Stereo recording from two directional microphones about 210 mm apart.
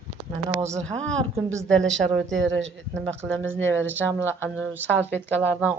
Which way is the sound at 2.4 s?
60° right (ahead or behind).